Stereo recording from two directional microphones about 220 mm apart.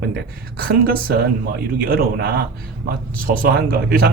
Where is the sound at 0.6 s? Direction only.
40° right (ahead or behind).